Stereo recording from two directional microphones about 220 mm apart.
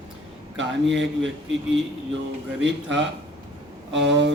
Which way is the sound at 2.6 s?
55° right (ahead or behind).